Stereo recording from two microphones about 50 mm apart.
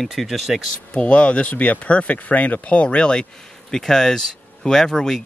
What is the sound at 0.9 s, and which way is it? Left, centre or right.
Speech, left.